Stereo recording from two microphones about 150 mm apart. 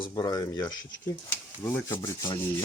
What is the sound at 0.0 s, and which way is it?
Speech, 25° left (ahead or behind).